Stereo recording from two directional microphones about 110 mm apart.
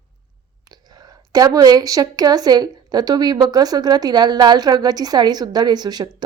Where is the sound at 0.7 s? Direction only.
35° right (ahead or behind).